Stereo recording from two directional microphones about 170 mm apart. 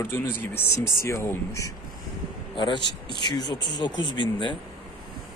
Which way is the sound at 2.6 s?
30° left (ahead or behind).